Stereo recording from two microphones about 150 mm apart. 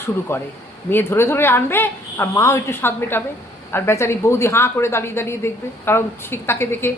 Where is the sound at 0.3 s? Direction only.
15° left (ahead or behind).